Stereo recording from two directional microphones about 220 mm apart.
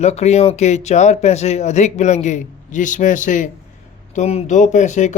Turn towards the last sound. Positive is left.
turn(degrees=35)  # may be behind; listen again after turning